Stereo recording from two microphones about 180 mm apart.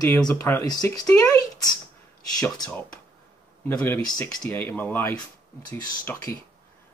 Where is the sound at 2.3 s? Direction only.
20° left (ahead or behind).